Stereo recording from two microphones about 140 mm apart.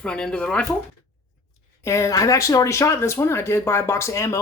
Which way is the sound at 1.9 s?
20° left (ahead or behind).